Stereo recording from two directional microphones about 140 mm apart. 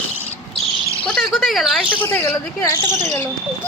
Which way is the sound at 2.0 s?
10° left (ahead or behind).